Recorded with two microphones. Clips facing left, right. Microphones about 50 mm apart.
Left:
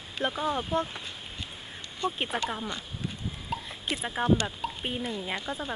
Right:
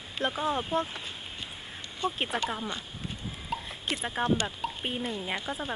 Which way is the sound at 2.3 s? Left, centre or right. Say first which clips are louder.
Even; centre.